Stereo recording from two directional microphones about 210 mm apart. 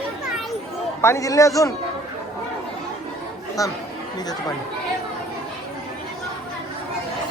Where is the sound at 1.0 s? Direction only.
15° left (ahead or behind).